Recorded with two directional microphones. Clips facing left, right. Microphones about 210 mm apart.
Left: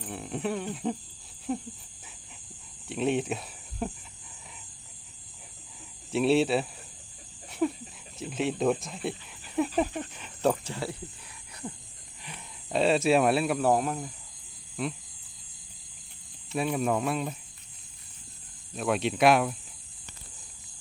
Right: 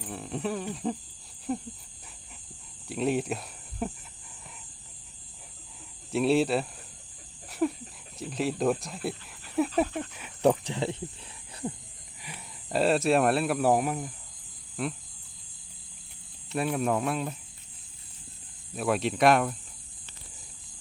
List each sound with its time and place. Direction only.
0.0 s speech: centre (ahead or behind)
2.8 s speech: centre (ahead or behind)
6.1 s speech: centre (ahead or behind)
9.8 s speech: 15° left (ahead or behind)
10.2 s speech: 10° right (ahead or behind)
10.5 s speech: 20° right (ahead or behind)
12.6 s speech: centre (ahead or behind)
16.5 s speech: centre (ahead or behind)
18.7 s speech: centre (ahead or behind)